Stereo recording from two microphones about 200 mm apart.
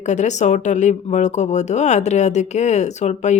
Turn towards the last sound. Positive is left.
turn(degrees=35)  # may be behind; listen again after turning